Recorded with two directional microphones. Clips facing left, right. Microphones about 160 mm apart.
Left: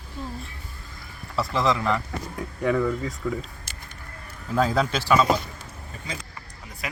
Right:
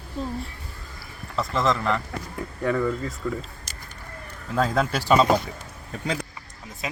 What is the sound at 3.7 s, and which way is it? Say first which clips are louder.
Vehicle: right 1 dB; 40° right (ahead or behind).